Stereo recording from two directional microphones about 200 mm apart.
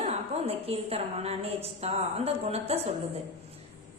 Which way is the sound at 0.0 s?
30° right (ahead or behind).